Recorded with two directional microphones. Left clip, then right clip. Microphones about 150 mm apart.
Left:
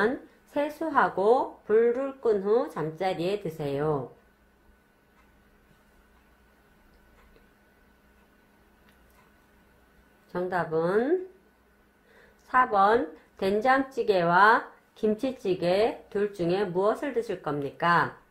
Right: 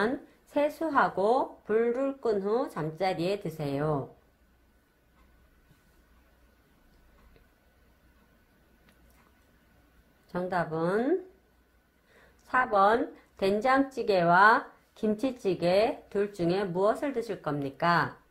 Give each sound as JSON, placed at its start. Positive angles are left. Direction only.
{"t": 0.0, "sound": "speech", "side_deg": -45}
{"t": 10.3, "sound": "speech", "side_deg": -40}
{"t": 12.4, "sound": "speech", "side_deg": -45}